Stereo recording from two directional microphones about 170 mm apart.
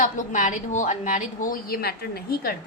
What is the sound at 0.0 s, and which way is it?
A woman's voice, 50° left (ahead or behind).